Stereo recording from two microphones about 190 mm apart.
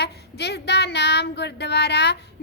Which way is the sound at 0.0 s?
60° left (ahead or behind).